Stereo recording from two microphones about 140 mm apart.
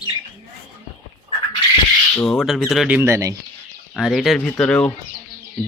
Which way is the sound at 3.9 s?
Centre (ahead or behind).